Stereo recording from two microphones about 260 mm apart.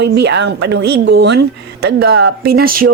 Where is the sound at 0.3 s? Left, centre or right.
Right.